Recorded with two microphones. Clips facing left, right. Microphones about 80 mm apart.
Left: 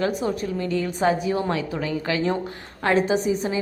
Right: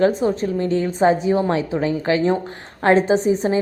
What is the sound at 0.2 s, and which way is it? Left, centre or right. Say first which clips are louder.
A woman's voice: right 5 dB; right.